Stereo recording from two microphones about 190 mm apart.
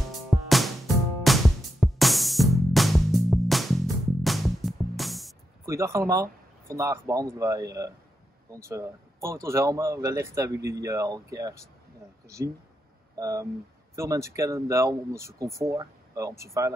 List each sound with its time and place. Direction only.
0.3 s music: centre (ahead or behind)
5.7 s speech: 15° right (ahead or behind)
13.2 s speech: 15° right (ahead or behind)